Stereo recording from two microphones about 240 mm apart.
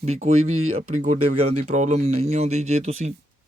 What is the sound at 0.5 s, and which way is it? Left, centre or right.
Speech, right.